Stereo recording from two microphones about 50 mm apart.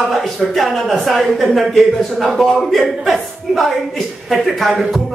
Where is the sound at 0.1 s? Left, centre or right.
Centre.